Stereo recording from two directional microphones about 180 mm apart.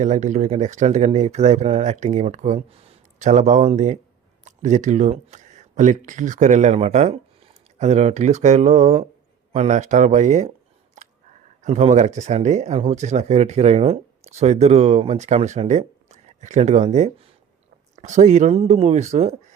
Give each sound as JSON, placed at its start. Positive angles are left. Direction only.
{"t": 0.0, "sound": "speech", "side_deg": -45}
{"t": 11.0, "sound": "a sound", "side_deg": -45}
{"t": 11.6, "sound": "speech", "side_deg": -40}